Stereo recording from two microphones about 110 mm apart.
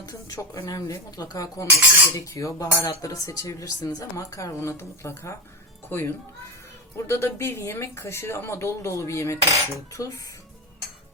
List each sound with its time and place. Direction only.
0.0 s a woman's voice: 30° left (ahead or behind)